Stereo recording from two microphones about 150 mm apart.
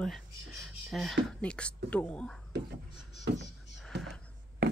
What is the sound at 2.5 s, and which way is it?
Speech, 90° right.